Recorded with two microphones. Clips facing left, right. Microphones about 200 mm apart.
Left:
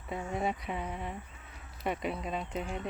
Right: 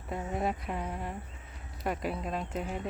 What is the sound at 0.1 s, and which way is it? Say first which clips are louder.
Speech: right 1 dB; centre (ahead or behind).